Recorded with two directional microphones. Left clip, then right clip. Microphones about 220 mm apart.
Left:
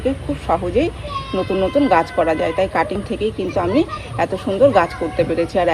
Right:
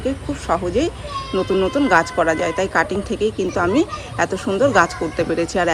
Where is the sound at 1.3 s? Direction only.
40° right (ahead or behind).